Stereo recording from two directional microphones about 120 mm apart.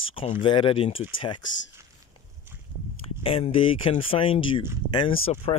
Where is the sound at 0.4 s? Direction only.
45° left (ahead or behind).